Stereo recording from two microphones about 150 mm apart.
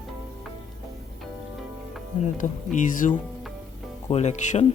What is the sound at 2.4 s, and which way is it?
Speech, 60° left (ahead or behind).